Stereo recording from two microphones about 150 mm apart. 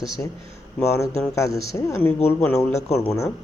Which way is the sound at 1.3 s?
20° left (ahead or behind).